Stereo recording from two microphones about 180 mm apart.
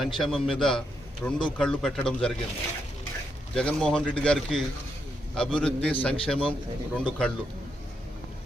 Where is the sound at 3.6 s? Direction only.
5° left (ahead or behind).